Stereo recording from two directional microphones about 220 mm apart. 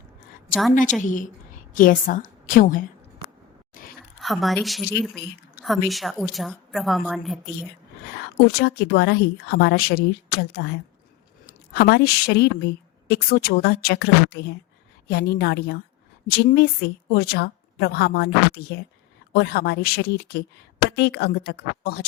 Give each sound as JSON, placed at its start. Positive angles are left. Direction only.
{"t": 1.0, "sound": "a woman's voice", "side_deg": 35}
{"t": 3.8, "sound": "a sound", "side_deg": 40}
{"t": 4.2, "sound": "a woman's voice", "side_deg": 0}
{"t": 8.5, "sound": "a woman's voice", "side_deg": 50}